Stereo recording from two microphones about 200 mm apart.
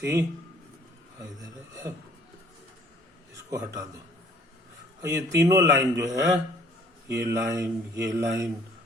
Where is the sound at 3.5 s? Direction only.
15° right (ahead or behind).